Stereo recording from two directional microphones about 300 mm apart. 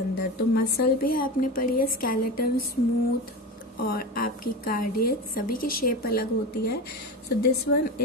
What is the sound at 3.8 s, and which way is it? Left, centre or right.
Speech, left.